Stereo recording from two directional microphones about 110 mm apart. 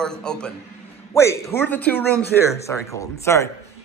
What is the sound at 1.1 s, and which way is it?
A woman's voice, 25° left (ahead or behind).